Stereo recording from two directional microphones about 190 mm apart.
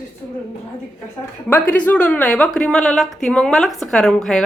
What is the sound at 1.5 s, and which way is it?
A woman's voice, 10° left (ahead or behind).